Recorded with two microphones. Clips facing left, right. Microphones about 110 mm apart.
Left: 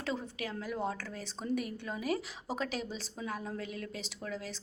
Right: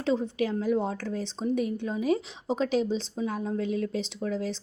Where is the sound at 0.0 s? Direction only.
25° right (ahead or behind).